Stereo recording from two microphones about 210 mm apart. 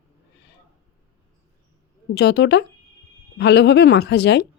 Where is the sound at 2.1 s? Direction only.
55° left (ahead or behind).